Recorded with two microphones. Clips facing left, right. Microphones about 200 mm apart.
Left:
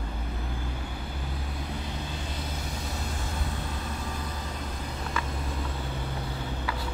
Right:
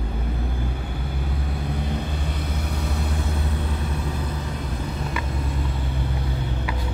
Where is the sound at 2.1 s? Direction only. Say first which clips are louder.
Right 6 dB; 60° right (ahead or behind).